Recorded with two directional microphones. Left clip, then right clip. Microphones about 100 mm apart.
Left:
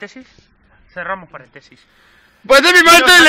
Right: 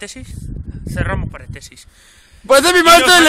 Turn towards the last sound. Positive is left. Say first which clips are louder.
# left 1 dB
turn(degrees=-15)  # may be behind; listen again after turning